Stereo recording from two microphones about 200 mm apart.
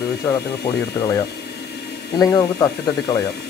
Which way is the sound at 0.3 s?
20° left (ahead or behind).